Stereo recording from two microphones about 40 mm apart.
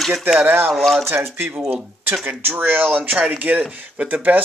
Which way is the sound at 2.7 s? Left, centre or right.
Right.